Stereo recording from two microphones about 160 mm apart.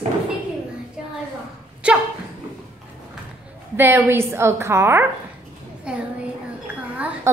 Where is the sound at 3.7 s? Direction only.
15° right (ahead or behind).